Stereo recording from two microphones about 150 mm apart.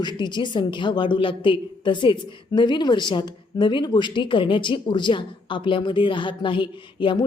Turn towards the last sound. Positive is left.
turn(degrees=35)  # may be behind; listen again after turning